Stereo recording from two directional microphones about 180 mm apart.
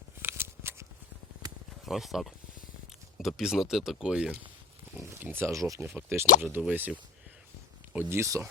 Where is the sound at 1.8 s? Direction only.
Centre (ahead or behind).